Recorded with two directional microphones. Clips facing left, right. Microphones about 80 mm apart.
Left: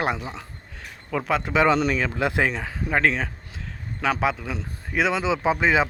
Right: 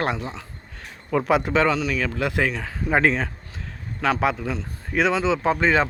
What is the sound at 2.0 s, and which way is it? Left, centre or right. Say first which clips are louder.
Speech: even; left.